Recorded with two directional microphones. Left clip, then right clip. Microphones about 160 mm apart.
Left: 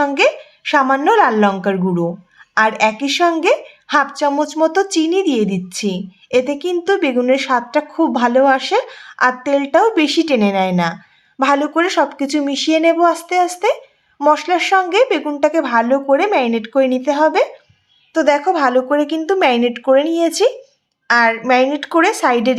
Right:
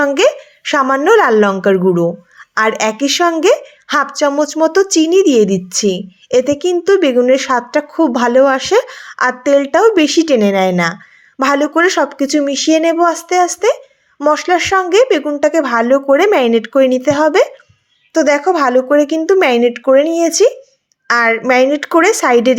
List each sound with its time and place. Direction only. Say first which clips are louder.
0.0 s a woman's voice: right 3 dB; 30° right (ahead or behind)
21.1 s a woman's voice: right 1 dB; 30° right (ahead or behind)